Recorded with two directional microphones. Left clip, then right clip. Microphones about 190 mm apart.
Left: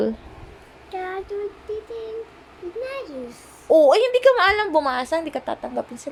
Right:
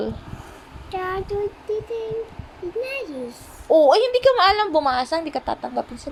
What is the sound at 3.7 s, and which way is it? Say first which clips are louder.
A woman's voice: even; 10° left (ahead or behind).